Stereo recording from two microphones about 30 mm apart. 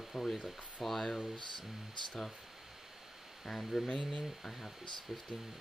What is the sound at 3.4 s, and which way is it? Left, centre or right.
Speech, centre.